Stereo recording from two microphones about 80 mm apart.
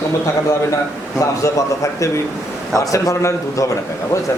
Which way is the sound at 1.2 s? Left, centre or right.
Left.